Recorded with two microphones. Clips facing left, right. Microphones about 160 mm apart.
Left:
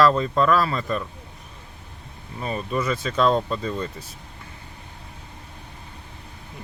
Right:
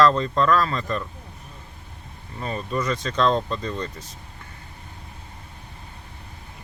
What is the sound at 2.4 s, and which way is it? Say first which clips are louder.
Speech: left 1 dB; 10° left (ahead or behind).